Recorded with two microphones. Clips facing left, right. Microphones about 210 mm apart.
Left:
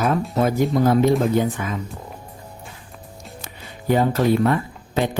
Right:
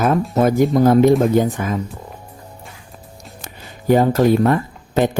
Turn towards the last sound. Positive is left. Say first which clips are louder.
# right 5 dB
turn(degrees=-45)  # may be behind; listen again after turning